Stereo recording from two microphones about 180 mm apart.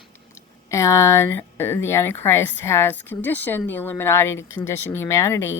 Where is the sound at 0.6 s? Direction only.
15° left (ahead or behind).